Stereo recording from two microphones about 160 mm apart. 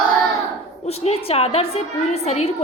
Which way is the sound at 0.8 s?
40° left (ahead or behind).